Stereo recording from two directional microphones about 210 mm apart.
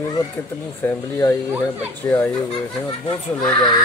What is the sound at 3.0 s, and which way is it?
Speech, 20° left (ahead or behind).